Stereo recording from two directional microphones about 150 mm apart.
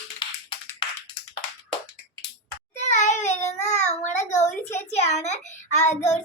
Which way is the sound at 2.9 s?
50° left (ahead or behind).